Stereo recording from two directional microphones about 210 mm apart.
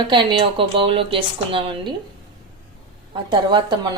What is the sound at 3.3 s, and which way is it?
Speech, 20° right (ahead or behind).